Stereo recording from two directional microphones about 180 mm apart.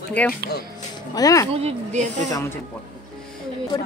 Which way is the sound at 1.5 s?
35° right (ahead or behind).